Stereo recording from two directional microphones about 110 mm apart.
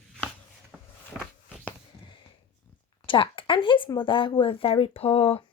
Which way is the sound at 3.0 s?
50° left (ahead or behind).